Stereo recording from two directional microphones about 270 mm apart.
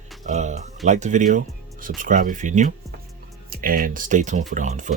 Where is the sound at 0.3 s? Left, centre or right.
Right.